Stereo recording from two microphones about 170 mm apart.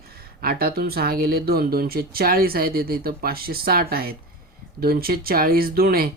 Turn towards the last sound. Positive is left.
turn(degrees=-60)  # may be behind; listen again after turning